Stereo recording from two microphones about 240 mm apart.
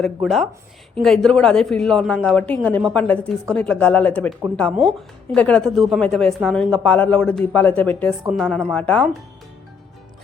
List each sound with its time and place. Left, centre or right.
0.0 s speech: centre